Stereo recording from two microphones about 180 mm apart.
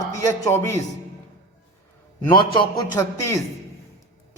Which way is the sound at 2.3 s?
25° left (ahead or behind).